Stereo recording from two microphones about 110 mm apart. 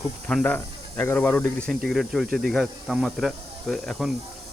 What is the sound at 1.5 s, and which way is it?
Speech, 5° left (ahead or behind).